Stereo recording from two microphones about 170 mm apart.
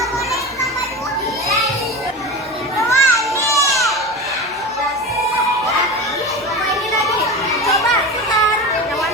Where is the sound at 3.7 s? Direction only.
Centre (ahead or behind).